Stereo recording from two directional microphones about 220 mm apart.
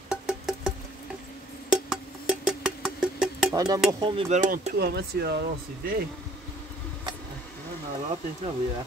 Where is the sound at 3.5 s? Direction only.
15° right (ahead or behind); by 6.0 s 45° right (ahead or behind).